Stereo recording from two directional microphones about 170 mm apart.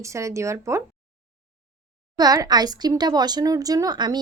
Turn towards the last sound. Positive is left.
turn(degrees=-25)  # may be behind; listen again after turning